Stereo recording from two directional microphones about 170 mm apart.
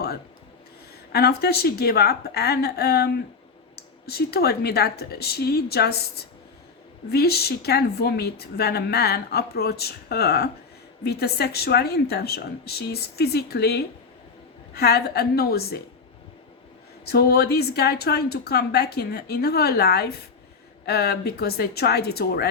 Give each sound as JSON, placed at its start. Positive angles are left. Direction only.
{"t": 1.1, "sound": "speech", "side_deg": 70}
{"t": 17.1, "sound": "speech", "side_deg": 70}